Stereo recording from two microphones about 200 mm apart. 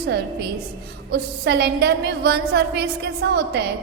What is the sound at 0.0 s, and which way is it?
A woman's voice, 50° right (ahead or behind).